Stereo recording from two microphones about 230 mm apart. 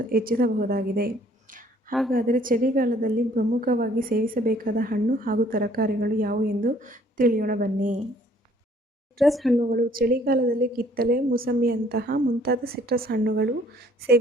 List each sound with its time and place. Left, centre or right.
0.1 s a woman's voice: right
1.9 s a woman's voice: centre
2.1 s a woman's voice: right
9.1 s speech: centre
9.6 s a woman's voice: right